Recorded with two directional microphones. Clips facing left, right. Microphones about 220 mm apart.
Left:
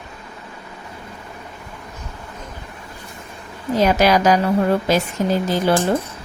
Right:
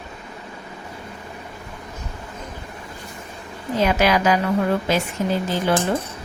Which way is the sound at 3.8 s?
40° left (ahead or behind).